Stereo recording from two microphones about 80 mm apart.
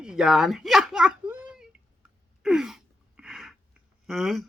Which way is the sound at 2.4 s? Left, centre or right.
Centre.